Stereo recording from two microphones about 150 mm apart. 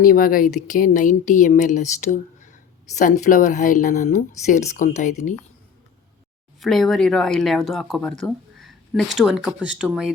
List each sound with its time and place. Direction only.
0.0 s speech: 70° left (ahead or behind)
6.6 s speech: centre (ahead or behind)